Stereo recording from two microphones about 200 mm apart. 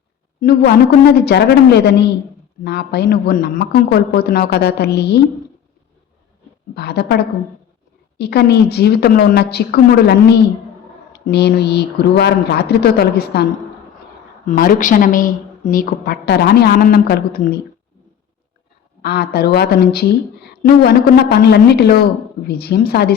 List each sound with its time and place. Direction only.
0.3 s a woman's voice: 55° left (ahead or behind)
6.7 s speech: 55° left (ahead or behind)
8.2 s a woman's voice: 55° left (ahead or behind)
19.0 s a woman's voice: 50° left (ahead or behind)